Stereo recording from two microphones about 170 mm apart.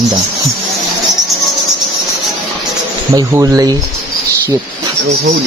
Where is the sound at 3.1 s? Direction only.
20° right (ahead or behind).